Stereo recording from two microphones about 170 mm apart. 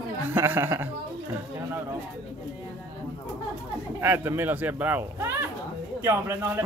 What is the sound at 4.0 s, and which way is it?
Speech, 15° right (ahead or behind).